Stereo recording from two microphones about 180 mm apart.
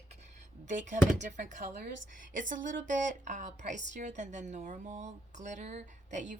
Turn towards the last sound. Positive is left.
turn(degrees=-40)  # may be behind; listen again after turning